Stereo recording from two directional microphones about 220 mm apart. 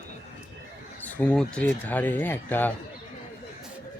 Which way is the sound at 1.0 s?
5° left (ahead or behind).